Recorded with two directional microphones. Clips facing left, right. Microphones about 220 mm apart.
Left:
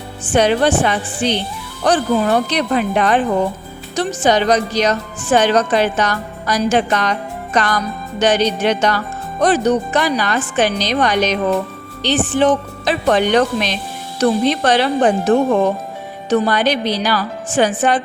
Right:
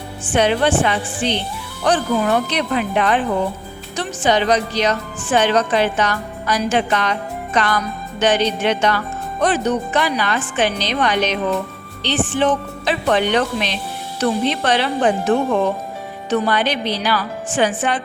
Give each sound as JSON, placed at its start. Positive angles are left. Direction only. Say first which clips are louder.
{"t": 0.3, "sound": "a woman's voice", "louder": "left 2 dB", "side_deg": 40}